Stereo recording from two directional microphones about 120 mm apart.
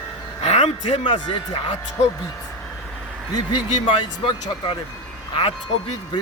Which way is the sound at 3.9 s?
45° left (ahead or behind).